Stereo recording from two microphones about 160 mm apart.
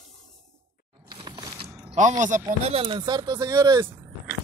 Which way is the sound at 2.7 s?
30° right (ahead or behind).